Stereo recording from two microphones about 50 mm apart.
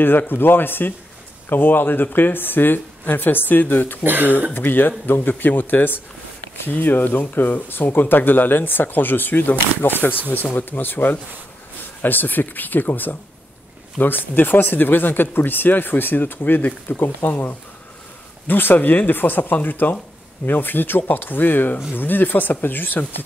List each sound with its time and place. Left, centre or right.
0.0 s speech: left
4.0 s speech: right
4.6 s speech: left